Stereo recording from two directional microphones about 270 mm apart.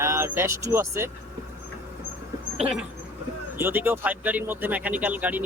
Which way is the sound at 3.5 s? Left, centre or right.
Centre.